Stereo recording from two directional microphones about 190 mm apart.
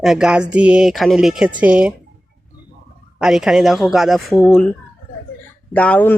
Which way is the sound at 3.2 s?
Centre (ahead or behind).